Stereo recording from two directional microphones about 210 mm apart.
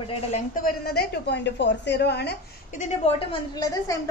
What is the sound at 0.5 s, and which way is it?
A woman's voice, 45° left (ahead or behind).